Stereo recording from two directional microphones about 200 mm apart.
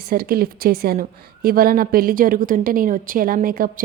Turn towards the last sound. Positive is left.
turn(degrees=-45)  # may be behind; listen again after turning